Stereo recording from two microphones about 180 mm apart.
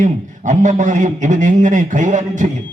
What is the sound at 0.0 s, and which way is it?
A man's voice, 40° right (ahead or behind).